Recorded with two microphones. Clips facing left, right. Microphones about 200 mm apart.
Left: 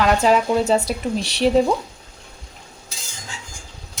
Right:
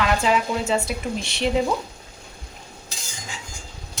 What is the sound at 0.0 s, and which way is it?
Speech, 40° left (ahead or behind).